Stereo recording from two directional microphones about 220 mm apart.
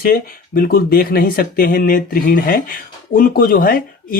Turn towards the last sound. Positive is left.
turn(degrees=40)  # may be behind; listen again after turning